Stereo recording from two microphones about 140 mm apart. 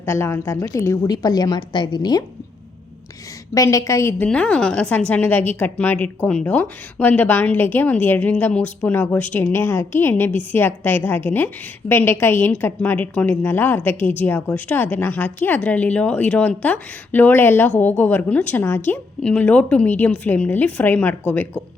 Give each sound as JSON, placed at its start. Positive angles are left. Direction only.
{"t": 0.0, "sound": "a woman's voice", "side_deg": 20}
{"t": 3.5, "sound": "a woman's voice", "side_deg": 25}
{"t": 4.3, "sound": "a woman's voice", "side_deg": 5}